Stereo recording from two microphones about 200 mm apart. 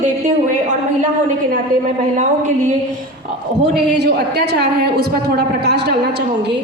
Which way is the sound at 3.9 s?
55° right (ahead or behind).